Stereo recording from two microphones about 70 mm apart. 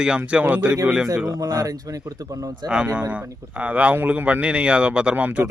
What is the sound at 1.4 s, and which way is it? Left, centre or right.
Speech, right.